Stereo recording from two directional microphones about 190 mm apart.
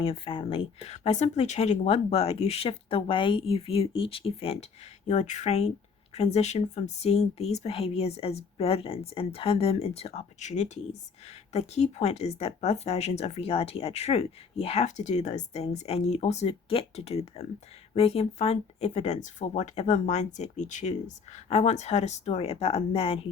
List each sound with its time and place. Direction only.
0.0 s speech: 30° left (ahead or behind)